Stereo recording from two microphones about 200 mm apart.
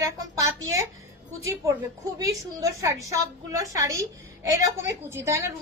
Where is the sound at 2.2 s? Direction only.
15° right (ahead or behind).